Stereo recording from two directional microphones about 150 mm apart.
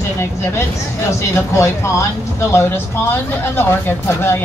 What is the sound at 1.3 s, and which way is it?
Speech, 20° left (ahead or behind).